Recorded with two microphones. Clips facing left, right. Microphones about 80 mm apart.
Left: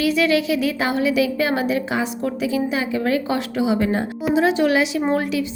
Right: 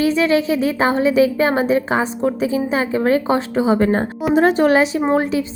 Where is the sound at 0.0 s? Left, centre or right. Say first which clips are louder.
Right 3 dB; right.